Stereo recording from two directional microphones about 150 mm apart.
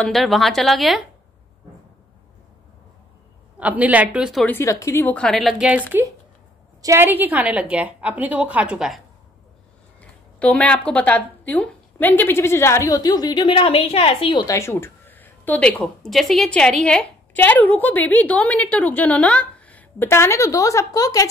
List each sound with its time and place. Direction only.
0.0 s a woman's voice: centre (ahead or behind)
3.5 s a woman's voice: 10° right (ahead or behind)
4.5 s a woman's voice: 20° left (ahead or behind)
5.1 s a woman's voice: 5° left (ahead or behind)
6.8 s a woman's voice: 15° right (ahead or behind)
9.9 s a woman's voice: 10° left (ahead or behind)